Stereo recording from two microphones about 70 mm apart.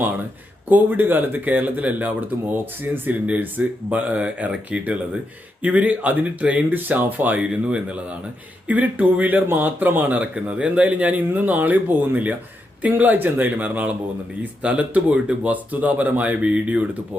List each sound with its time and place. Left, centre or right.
0.7 s speech: right
7.5 s speech: centre